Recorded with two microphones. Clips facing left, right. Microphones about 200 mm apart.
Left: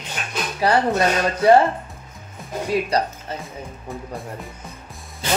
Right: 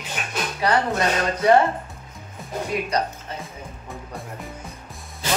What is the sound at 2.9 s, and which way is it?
Speech, 30° left (ahead or behind).